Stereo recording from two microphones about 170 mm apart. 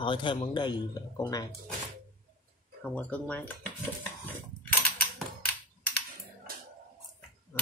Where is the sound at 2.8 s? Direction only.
10° left (ahead or behind).